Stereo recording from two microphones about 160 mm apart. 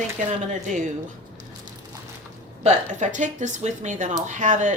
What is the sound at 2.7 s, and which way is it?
A woman's voice, 50° right (ahead or behind).